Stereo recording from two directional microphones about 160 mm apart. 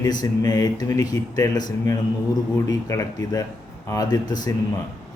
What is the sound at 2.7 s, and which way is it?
Speech, 20° left (ahead or behind).